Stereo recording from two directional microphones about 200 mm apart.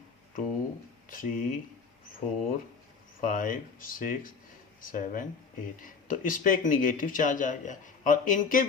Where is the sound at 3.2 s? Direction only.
40° left (ahead or behind).